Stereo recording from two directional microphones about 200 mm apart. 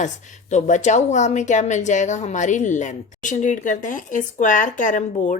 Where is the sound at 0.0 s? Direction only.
35° left (ahead or behind).